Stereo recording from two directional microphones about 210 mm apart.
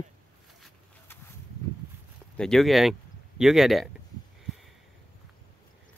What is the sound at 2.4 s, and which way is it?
Speech, centre (ahead or behind).